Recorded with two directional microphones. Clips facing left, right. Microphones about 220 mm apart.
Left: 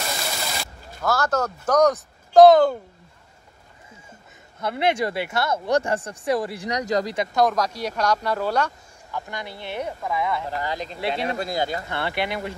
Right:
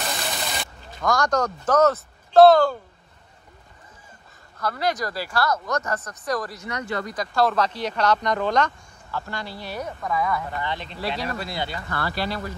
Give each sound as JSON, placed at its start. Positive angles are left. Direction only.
{"t": 0.3, "sound": "speech", "side_deg": 0}
{"t": 4.6, "sound": "speech", "side_deg": 25}
{"t": 7.2, "sound": "speech", "side_deg": 15}
{"t": 10.6, "sound": "speech", "side_deg": 40}
{"t": 11.0, "sound": "speech", "side_deg": 25}
{"t": 11.3, "sound": "speech", "side_deg": 45}
{"t": 11.9, "sound": "speech", "side_deg": 20}